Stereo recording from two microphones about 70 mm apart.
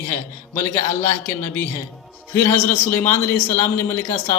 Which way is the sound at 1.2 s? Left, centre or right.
Left.